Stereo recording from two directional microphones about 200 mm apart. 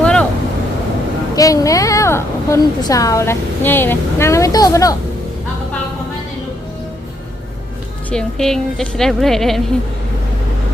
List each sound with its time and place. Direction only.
0.0 s vehicle: 5° left (ahead or behind)
1.4 s a woman's voice: 15° left (ahead or behind)
8.1 s a woman's voice: centre (ahead or behind)